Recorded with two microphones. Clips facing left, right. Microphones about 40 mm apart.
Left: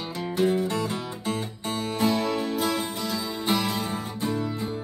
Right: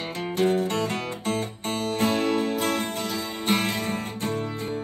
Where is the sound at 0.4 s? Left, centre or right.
Right.